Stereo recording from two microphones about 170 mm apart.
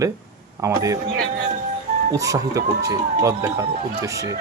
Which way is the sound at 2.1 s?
20° right (ahead or behind).